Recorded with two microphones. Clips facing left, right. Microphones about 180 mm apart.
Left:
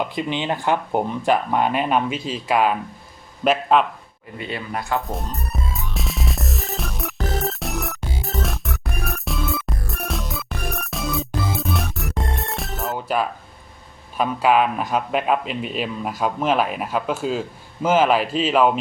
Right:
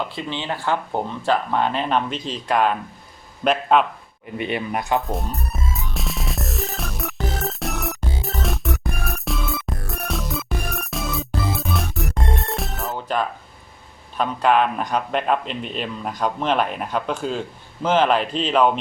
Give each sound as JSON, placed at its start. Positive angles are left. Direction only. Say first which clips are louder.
{"t": 0.0, "sound": "a man's voice", "louder": "left 4 dB", "side_deg": 15}
{"t": 4.4, "sound": "speech", "louder": "right 4 dB", "side_deg": -20}
{"t": 5.0, "sound": "music", "louder": "right 2 dB", "side_deg": 0}
{"t": 14.2, "sound": "a man's voice", "louder": "left 1 dB", "side_deg": 5}